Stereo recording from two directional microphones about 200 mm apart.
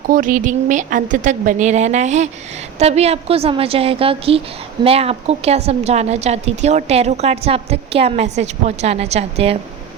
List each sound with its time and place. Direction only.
0.1 s a woman's voice: 45° right (ahead or behind)